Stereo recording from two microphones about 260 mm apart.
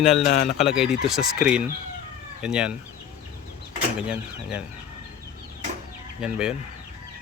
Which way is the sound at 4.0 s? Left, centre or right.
Centre.